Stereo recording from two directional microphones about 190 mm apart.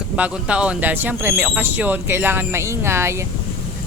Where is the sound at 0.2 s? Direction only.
5° right (ahead or behind).